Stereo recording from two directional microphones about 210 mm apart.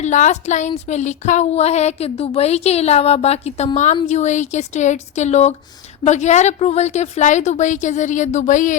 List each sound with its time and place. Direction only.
0.0 s a woman's voice: 35° left (ahead or behind)